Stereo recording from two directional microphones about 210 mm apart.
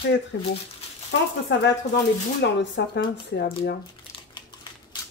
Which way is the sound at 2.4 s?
55° left (ahead or behind).